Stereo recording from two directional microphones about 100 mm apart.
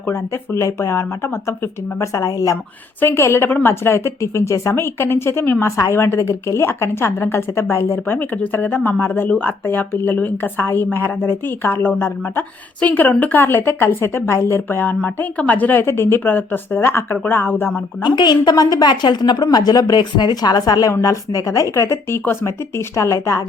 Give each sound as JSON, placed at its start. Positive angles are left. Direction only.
{"t": 0.1, "sound": "a woman's voice", "side_deg": 30}
{"t": 2.2, "sound": "speech", "side_deg": 40}
{"t": 3.0, "sound": "a woman's voice", "side_deg": 25}
{"t": 18.0, "sound": "a woman's voice", "side_deg": 45}